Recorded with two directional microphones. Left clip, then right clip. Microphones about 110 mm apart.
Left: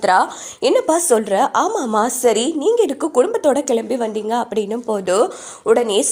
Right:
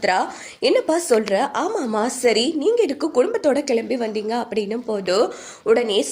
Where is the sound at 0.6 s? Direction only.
45° left (ahead or behind).